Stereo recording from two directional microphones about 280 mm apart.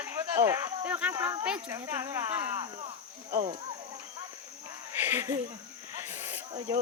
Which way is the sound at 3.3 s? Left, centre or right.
Right.